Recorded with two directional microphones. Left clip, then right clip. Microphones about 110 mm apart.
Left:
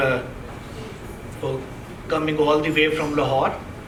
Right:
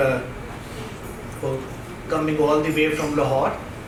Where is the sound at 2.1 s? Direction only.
25° left (ahead or behind).